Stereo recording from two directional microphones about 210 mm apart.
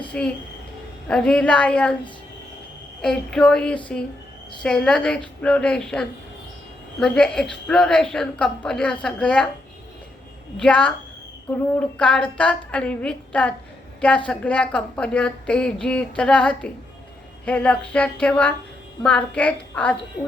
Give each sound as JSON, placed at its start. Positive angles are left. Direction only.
{"t": 0.1, "sound": "a woman's voice", "side_deg": 5}
{"t": 3.0, "sound": "a woman's voice", "side_deg": 0}
{"t": 10.6, "sound": "a woman's voice", "side_deg": 5}